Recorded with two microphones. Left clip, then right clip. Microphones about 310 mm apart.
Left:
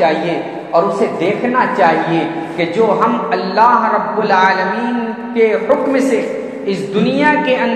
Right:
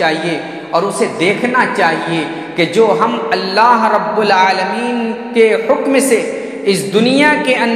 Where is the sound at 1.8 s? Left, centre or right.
Right.